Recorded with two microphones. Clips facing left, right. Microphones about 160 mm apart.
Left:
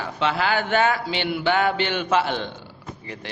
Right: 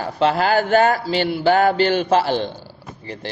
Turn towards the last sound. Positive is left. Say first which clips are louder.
# right 4 dB
turn(degrees=-30)  # may be behind; listen again after turning